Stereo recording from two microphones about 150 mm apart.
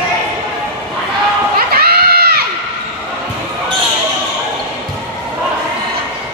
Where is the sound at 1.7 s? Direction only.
90° right.